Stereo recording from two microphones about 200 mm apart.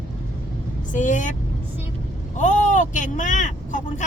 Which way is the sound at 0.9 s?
40° left (ahead or behind).